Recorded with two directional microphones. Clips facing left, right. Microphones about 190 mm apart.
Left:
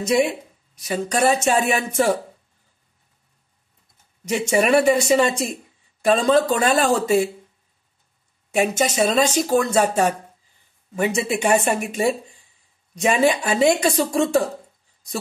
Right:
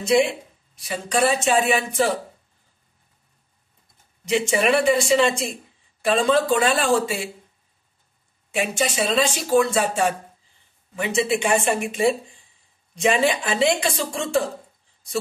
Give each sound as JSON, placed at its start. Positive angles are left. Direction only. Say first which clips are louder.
{"t": 0.0, "sound": "speech", "louder": "even", "side_deg": 40}
{"t": 4.3, "sound": "speech", "louder": "left 2 dB", "side_deg": 45}
{"t": 8.5, "sound": "speech", "louder": "left 4 dB", "side_deg": 40}